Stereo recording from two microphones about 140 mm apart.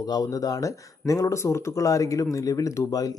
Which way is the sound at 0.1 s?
25° left (ahead or behind).